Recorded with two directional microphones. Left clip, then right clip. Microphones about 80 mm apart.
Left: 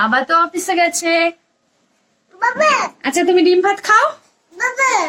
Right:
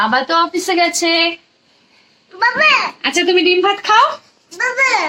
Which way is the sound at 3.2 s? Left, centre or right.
Right.